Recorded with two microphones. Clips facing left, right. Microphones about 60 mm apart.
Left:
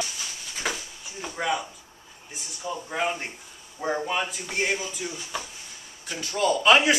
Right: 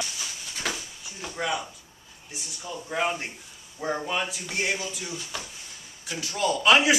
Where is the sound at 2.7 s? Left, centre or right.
Centre.